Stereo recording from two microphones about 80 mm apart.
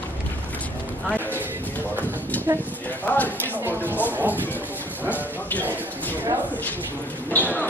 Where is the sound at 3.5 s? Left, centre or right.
Right.